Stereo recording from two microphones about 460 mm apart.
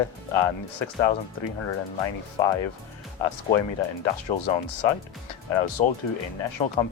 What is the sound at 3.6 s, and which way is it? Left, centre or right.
Speech, left.